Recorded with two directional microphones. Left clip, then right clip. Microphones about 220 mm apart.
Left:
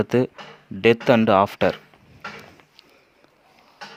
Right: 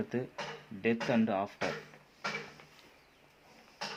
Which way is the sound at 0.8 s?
45° left (ahead or behind).